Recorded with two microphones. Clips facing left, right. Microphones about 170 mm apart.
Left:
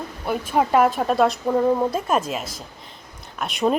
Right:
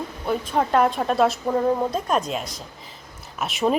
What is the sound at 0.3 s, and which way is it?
A woman's voice, 5° left (ahead or behind).